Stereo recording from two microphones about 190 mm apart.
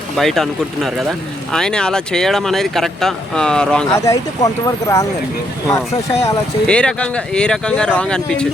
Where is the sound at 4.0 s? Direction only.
15° left (ahead or behind).